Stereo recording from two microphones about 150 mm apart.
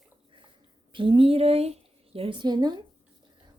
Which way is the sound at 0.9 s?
35° right (ahead or behind).